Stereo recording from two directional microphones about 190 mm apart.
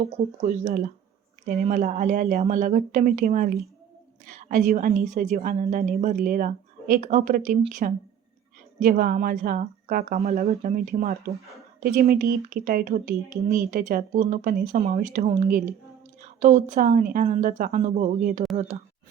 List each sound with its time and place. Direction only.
0.0 s a woman's voice: 35° right (ahead or behind)